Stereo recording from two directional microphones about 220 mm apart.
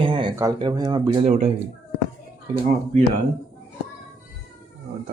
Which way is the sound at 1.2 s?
30° right (ahead or behind).